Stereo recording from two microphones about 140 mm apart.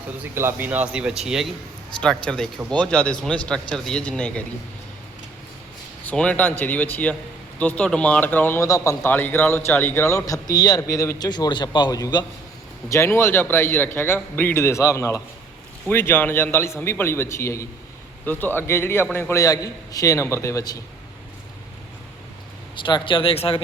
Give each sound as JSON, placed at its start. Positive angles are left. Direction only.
{"t": 0.3, "sound": "a man's voice", "side_deg": -15}
{"t": 6.1, "sound": "speech", "side_deg": 10}
{"t": 8.6, "sound": "a man's voice", "side_deg": 25}
{"t": 22.7, "sound": "speech", "side_deg": 35}